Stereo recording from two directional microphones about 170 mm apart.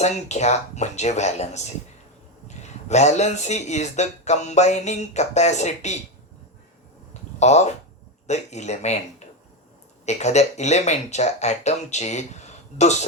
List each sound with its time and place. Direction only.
0.0 s speech: 40° left (ahead or behind)
7.1 s a sound: 40° left (ahead or behind)
8.3 s speech: 40° left (ahead or behind)